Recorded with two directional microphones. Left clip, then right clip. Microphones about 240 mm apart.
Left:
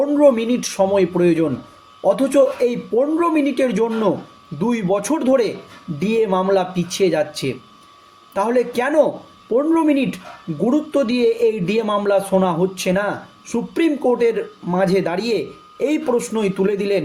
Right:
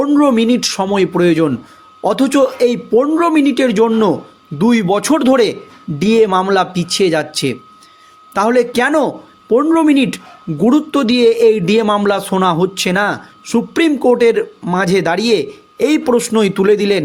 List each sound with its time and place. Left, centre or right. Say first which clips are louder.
0.0 s speech: right 2 dB; right